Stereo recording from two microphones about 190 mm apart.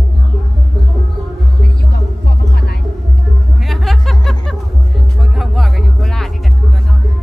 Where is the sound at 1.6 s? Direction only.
55° left (ahead or behind).